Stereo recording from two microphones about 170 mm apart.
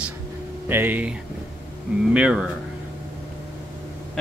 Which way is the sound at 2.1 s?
5° right (ahead or behind).